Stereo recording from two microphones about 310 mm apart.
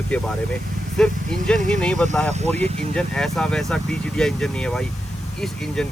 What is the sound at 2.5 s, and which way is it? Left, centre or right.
Speech, right.